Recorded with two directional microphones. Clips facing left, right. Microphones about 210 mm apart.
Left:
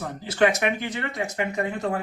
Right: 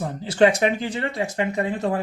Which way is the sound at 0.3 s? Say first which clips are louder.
Right 4 dB; 30° right (ahead or behind).